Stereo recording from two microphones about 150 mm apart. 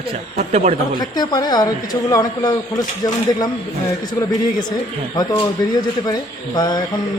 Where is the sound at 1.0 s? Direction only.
25° left (ahead or behind).